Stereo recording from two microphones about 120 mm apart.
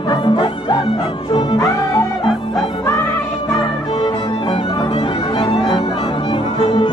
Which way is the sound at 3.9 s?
35° left (ahead or behind).